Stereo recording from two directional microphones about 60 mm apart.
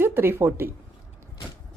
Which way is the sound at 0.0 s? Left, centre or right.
Right.